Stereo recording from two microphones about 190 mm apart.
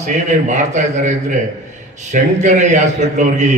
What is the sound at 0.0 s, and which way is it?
A man's voice, 40° right (ahead or behind).